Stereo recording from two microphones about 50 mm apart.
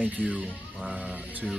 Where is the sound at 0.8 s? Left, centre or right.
Centre.